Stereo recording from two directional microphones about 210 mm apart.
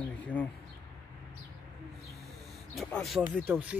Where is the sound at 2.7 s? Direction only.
Centre (ahead or behind).